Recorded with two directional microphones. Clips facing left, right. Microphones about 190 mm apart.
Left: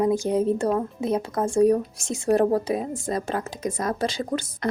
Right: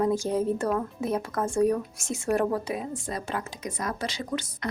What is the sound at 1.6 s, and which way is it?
A woman's voice, 30° left (ahead or behind).